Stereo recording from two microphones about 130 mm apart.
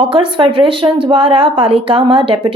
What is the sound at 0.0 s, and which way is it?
Speech, 40° right (ahead or behind).